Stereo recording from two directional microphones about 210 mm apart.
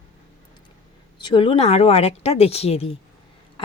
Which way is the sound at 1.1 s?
20° left (ahead or behind).